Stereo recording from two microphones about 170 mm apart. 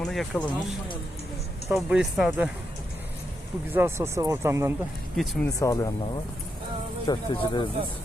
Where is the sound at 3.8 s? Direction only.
15° right (ahead or behind).